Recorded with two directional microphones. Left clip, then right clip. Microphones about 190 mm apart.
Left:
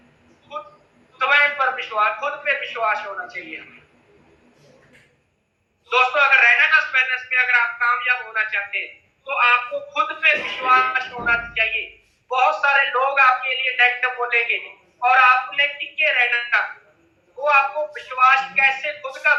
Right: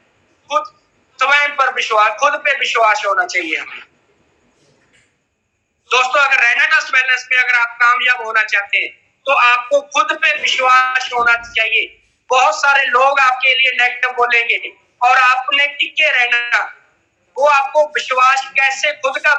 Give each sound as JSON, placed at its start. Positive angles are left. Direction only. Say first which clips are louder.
{"t": 1.1, "sound": "a man's voice", "louder": "right 4 dB", "side_deg": -55}
{"t": 5.9, "sound": "a man's voice", "louder": "right 3 dB", "side_deg": -55}